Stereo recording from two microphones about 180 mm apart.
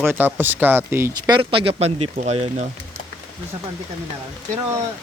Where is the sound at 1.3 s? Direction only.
30° right (ahead or behind).